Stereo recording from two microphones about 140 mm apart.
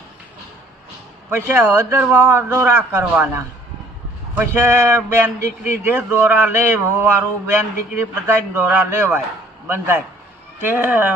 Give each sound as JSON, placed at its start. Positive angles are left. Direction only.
{"t": 1.3, "sound": "a man's voice", "side_deg": -15}